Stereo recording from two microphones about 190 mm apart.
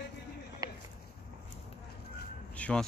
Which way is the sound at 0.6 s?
20° right (ahead or behind).